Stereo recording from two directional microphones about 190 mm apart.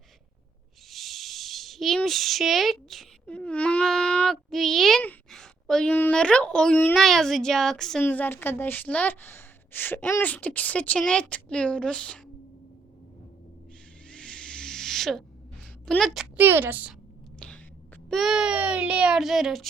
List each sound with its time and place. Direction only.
0.9 s speech: centre (ahead or behind)
14.1 s snake: 5° left (ahead or behind)
15.9 s speech: centre (ahead or behind)
16.4 s a woman's voice: 10° right (ahead or behind)
17.4 s a sound: 5° left (ahead or behind)
18.1 s speech: centre (ahead or behind)